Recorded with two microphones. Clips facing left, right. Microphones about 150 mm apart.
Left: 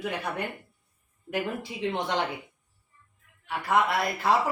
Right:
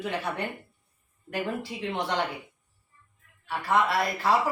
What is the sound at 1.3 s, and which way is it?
Speech, 15° left (ahead or behind).